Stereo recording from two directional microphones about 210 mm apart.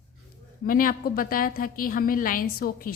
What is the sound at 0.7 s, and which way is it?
A woman's voice, 40° left (ahead or behind).